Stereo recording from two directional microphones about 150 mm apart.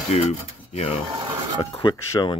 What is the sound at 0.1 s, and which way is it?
Speech, 45° left (ahead or behind).